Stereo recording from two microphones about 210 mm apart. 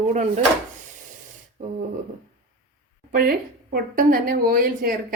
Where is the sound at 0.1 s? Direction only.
35° right (ahead or behind).